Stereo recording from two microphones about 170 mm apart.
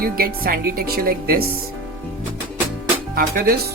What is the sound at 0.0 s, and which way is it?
Speech, 60° right (ahead or behind).